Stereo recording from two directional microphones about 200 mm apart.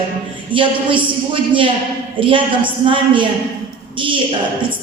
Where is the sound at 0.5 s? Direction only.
25° right (ahead or behind).